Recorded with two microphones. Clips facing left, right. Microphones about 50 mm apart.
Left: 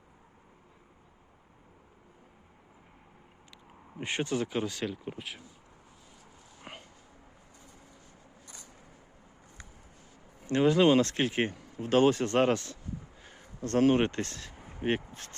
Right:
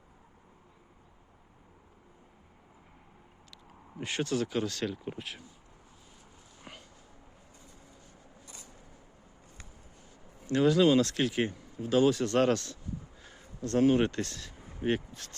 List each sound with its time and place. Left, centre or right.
3.5 s speech: left; by 5.4 s centre
6.6 s a sound: left
10.4 s speech: left
11.8 s speech: left
12.1 s speech: left
13.2 s a sound: left
13.9 s speech: left